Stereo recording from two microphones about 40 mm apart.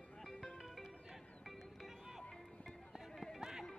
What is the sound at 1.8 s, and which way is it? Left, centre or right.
Music, centre.